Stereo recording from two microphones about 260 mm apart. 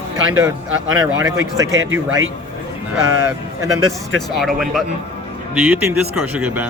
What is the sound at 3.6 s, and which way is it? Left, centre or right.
Speech, right.